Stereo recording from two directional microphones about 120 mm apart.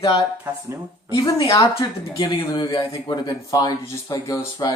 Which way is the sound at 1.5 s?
25° left (ahead or behind).